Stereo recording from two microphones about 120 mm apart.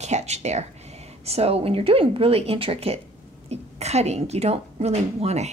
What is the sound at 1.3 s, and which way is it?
A woman's voice, 60° right (ahead or behind).